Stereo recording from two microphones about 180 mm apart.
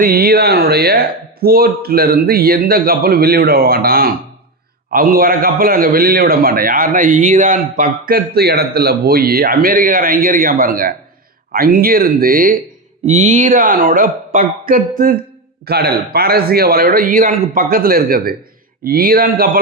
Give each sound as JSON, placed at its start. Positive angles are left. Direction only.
{"t": 0.0, "sound": "a man's voice", "side_deg": -55}
{"t": 13.1, "sound": "a man's voice", "side_deg": -40}
{"t": 15.6, "sound": "a man's voice", "side_deg": -60}